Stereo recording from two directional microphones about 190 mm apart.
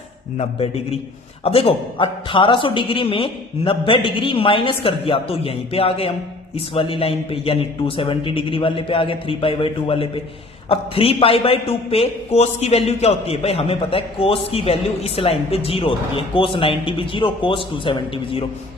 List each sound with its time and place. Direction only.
0.3 s a man's voice: 30° left (ahead or behind)